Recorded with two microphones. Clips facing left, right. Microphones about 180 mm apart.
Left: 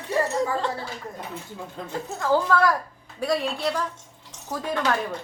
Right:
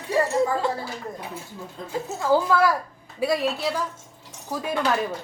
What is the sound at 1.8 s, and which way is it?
Speech, 60° left (ahead or behind).